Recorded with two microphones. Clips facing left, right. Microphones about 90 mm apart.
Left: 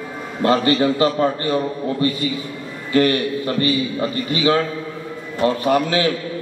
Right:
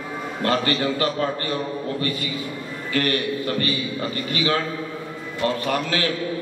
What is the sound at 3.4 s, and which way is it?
Speech, 30° left (ahead or behind).